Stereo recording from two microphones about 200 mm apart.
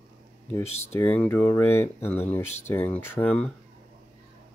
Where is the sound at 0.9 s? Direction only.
10° left (ahead or behind).